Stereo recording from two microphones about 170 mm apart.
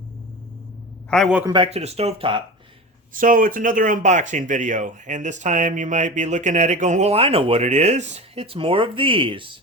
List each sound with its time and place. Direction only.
1.1 s a man's voice: centre (ahead or behind)
1.5 s speech: 30° right (ahead or behind)
3.1 s speech: 55° right (ahead or behind); by 9.6 s 30° right (ahead or behind)